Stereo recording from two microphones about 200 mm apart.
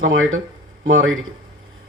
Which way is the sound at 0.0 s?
80° right.